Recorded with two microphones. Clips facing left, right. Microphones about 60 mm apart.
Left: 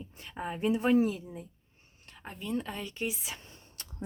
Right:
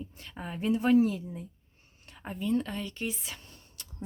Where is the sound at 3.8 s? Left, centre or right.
Left.